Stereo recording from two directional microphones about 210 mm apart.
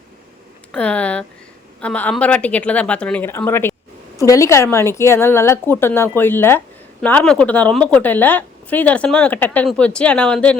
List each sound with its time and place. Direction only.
0.7 s a woman's voice: 5° left (ahead or behind)